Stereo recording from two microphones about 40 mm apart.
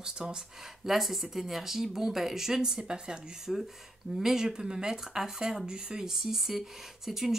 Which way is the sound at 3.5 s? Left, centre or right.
Centre.